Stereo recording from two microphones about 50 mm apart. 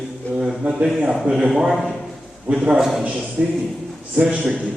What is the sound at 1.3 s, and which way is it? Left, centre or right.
Speech, right.